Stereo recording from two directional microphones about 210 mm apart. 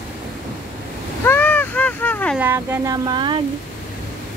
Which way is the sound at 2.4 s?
10° right (ahead or behind).